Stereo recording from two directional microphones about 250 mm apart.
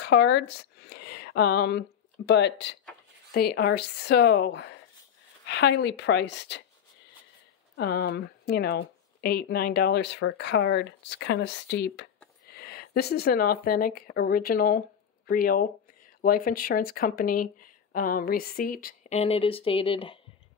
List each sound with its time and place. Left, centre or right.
0.0 s a woman's voice: left
7.7 s speech: left